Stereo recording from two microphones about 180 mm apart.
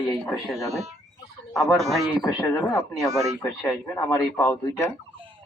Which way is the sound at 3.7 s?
20° left (ahead or behind).